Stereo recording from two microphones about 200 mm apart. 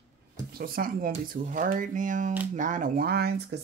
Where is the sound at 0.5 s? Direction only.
45° right (ahead or behind).